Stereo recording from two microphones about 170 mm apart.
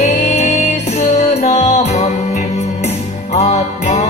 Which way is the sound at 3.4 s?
40° left (ahead or behind).